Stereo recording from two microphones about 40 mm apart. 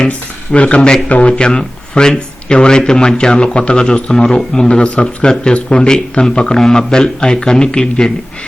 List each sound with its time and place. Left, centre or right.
0.1 s a man's voice: left
1.3 s speech: left